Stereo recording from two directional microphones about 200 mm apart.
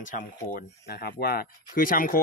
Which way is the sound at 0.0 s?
45° left (ahead or behind).